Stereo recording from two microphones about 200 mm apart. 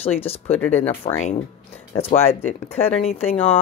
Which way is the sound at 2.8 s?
30° left (ahead or behind).